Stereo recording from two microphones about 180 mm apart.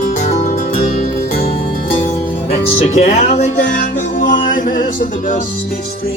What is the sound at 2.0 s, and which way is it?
Music, 40° left (ahead or behind).